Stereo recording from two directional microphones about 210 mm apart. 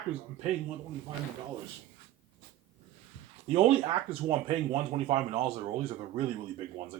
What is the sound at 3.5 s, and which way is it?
Speech, 25° right (ahead or behind).